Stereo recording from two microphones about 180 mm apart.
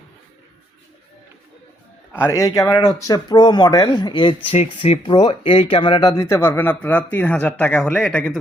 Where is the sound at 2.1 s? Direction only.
15° left (ahead or behind).